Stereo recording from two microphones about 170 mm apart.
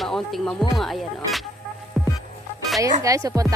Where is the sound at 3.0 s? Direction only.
20° right (ahead or behind).